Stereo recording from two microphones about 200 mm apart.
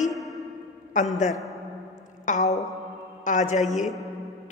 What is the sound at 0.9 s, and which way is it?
Speech, 35° left (ahead or behind).